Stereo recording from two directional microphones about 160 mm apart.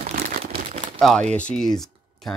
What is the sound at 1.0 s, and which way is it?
Speech, centre (ahead or behind).